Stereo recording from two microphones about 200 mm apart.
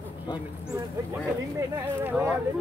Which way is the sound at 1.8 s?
10° right (ahead or behind).